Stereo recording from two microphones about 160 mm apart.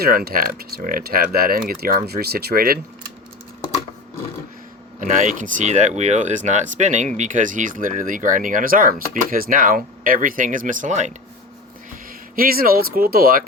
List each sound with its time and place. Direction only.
0.0 s speech: 75° right (ahead or behind)
4.9 s speech: 50° right (ahead or behind)
12.4 s speech: 65° right (ahead or behind)